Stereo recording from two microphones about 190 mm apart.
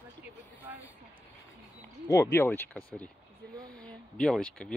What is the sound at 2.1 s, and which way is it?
Speech, 15° left (ahead or behind).